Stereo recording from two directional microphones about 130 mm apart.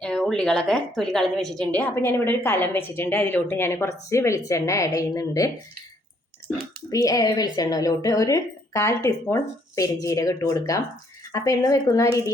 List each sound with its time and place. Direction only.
0.0 s a woman's voice: 5° left (ahead or behind); by 5.5 s 25° left (ahead or behind)
6.9 s a woman's voice: 25° left (ahead or behind)